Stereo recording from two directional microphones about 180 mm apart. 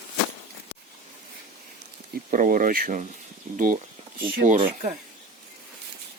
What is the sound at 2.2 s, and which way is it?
Speech, 50° right (ahead or behind).